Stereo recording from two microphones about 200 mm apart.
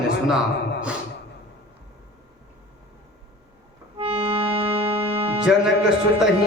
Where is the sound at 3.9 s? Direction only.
25° right (ahead or behind).